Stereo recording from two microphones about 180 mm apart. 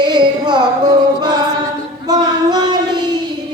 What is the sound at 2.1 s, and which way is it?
Child singing, 25° right (ahead or behind).